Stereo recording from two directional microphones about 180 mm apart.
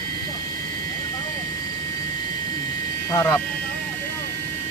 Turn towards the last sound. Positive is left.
turn(degrees=15)  # may be behind; listen again after turning